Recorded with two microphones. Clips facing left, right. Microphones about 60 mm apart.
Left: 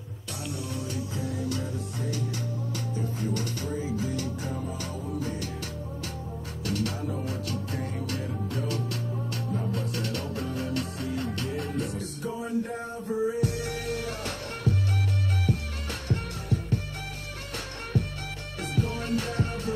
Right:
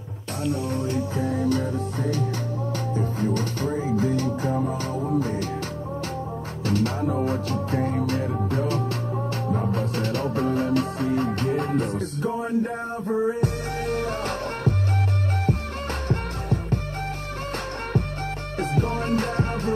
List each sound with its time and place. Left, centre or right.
0.4 s music: right
6.6 s music: right
16.1 s music: right
18.6 s music: right